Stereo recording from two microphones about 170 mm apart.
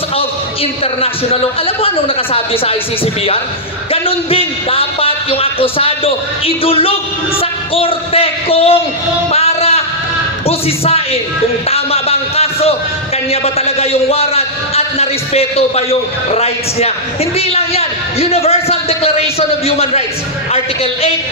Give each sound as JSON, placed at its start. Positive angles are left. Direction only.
{"t": 1.0, "sound": "a man's voice", "side_deg": 35}
{"t": 3.9, "sound": "a man's voice", "side_deg": 35}
{"t": 9.3, "sound": "a sound", "side_deg": 35}
{"t": 10.4, "sound": "a man's voice", "side_deg": 35}